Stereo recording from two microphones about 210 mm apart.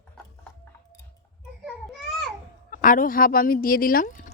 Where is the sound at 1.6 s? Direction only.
Centre (ahead or behind).